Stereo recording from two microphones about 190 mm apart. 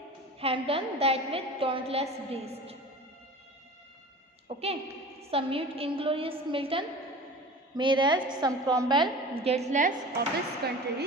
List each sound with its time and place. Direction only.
0.3 s a woman's voice: 30° right (ahead or behind)
4.4 s a woman's voice: 30° right (ahead or behind); by 10.7 s 45° right (ahead or behind)